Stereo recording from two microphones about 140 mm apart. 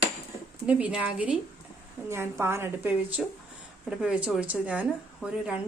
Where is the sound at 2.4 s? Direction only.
15° right (ahead or behind).